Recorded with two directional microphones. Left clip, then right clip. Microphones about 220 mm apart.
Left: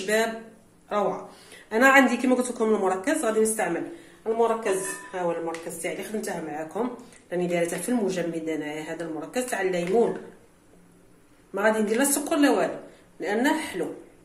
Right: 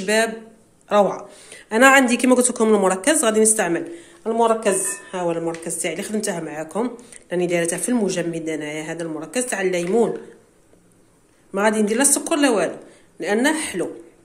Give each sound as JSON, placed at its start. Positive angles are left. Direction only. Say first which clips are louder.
{"t": 0.0, "sound": "speech", "louder": "right 5 dB", "side_deg": -40}
{"t": 11.5, "sound": "speech", "louder": "right 4 dB", "side_deg": -40}